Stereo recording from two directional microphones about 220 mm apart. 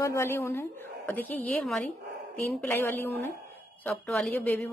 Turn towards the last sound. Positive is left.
turn(degrees=5)  # may be behind; listen again after turning